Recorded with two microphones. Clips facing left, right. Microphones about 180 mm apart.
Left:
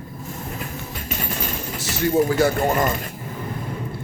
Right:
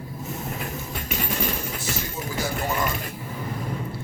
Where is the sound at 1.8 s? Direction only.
65° left (ahead or behind); by 2.9 s 50° left (ahead or behind).